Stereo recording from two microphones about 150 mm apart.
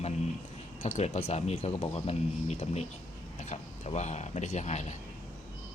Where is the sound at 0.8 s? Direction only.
45° left (ahead or behind).